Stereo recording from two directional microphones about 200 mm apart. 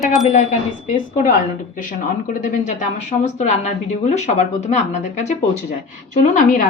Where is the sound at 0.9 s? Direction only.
40° left (ahead or behind).